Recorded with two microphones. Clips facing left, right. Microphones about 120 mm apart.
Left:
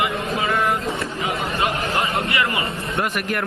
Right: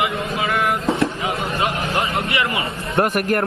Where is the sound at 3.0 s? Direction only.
45° right (ahead or behind).